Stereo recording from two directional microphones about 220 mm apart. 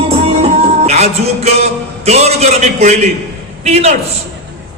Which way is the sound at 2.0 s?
30° right (ahead or behind).